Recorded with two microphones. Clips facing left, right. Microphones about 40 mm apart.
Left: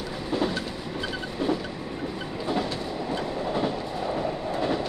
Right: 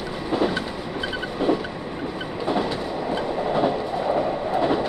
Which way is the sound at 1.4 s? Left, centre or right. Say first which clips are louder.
Right 5 dB; right.